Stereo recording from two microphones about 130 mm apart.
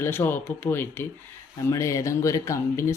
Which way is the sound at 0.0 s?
15° left (ahead or behind).